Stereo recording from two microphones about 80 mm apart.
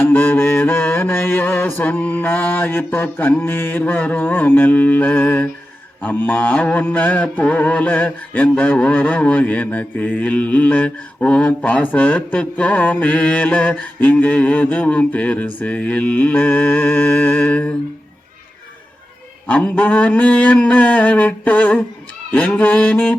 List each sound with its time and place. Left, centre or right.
0.0 s mantra: left
19.5 s a sound: centre
22.3 s mantra: centre